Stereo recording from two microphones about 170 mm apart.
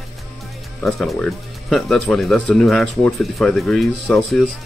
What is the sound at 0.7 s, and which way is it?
Speech, centre (ahead or behind).